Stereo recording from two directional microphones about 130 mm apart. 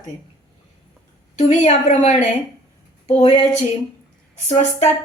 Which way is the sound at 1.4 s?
60° left (ahead or behind).